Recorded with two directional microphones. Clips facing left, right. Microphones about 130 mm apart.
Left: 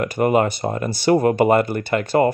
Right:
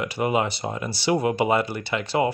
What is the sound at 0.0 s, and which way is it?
Speech, 50° left (ahead or behind).